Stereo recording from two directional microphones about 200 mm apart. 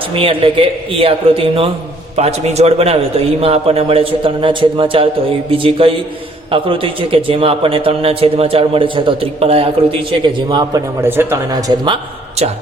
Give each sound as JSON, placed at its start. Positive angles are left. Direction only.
{"t": 0.1, "sound": "a man's voice", "side_deg": -25}